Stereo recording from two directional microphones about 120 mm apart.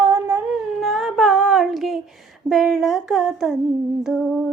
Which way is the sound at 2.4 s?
Centre (ahead or behind).